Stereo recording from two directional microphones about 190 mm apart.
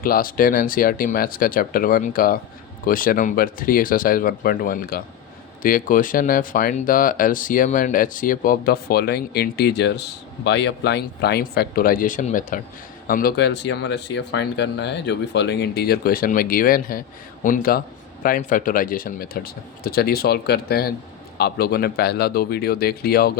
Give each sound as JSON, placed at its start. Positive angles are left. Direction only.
{"t": 0.0, "sound": "speech", "side_deg": 50}